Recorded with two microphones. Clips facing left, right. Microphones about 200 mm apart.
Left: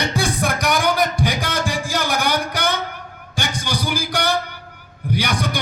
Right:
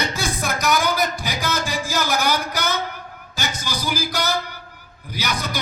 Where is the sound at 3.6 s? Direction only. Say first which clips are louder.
Left 2 dB; 65° left (ahead or behind).